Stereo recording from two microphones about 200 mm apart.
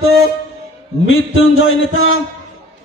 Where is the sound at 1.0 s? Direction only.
80° left.